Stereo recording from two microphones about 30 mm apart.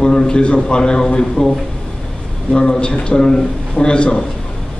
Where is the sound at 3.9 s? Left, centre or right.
Left.